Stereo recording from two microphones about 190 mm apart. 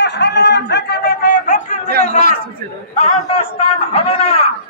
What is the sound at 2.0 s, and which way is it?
Chatter, 40° left (ahead or behind).